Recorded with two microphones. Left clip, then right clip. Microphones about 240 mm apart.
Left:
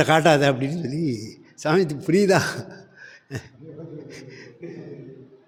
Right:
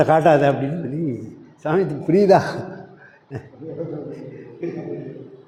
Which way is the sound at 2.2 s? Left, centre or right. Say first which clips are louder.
Right 5 dB; left.